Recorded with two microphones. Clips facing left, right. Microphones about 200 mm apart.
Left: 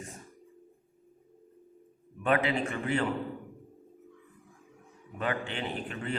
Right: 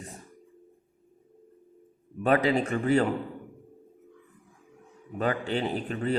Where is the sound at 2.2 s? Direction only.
40° right (ahead or behind).